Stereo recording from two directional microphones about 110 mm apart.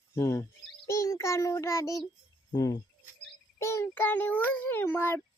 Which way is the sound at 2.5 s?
35° left (ahead or behind).